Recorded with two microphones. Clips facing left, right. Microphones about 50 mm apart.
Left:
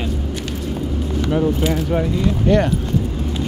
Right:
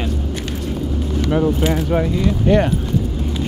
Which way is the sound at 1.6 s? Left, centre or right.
Right.